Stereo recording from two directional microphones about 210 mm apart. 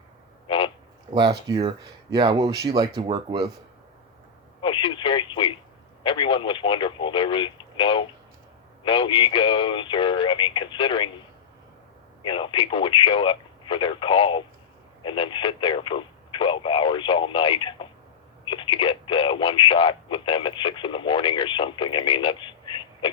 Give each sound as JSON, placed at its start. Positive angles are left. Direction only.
{"t": 0.4, "sound": "a sound", "side_deg": 25}
{"t": 1.1, "sound": "speech", "side_deg": -20}
{"t": 4.6, "sound": "telephone", "side_deg": 25}
{"t": 6.0, "sound": "speech", "side_deg": 25}
{"t": 12.2, "sound": "speech", "side_deg": 25}